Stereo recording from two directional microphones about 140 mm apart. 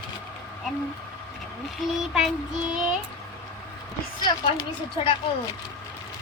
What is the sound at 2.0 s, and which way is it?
Child singing, 5° right (ahead or behind).